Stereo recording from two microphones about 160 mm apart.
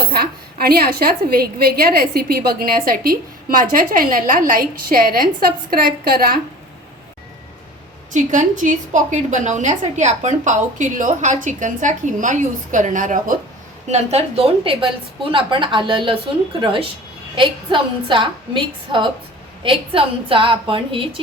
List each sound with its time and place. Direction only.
0.1 s a woman's voice: 75° right (ahead or behind)
8.1 s a woman's voice: 50° right (ahead or behind)
13.9 s a woman's voice: 40° right (ahead or behind)